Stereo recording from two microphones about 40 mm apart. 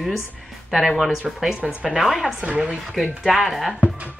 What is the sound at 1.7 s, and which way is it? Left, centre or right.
Speech, right.